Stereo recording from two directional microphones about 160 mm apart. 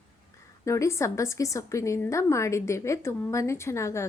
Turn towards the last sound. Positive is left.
turn(degrees=20)  # may be behind; listen again after turning